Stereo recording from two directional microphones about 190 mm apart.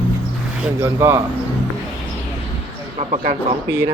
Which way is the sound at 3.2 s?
45° right (ahead or behind).